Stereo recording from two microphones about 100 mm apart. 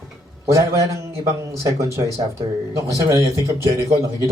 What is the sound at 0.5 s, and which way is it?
Speech, 30° right (ahead or behind).